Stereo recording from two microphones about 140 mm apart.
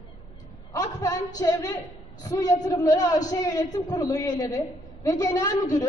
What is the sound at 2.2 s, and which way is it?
A woman's voice, 25° left (ahead or behind).